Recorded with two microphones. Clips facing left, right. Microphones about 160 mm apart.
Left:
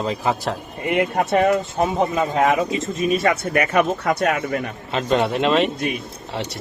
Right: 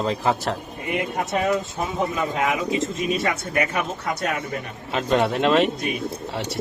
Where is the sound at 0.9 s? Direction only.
65° left (ahead or behind).